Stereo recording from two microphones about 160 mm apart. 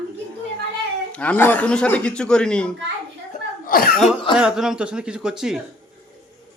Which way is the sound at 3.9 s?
Centre (ahead or behind).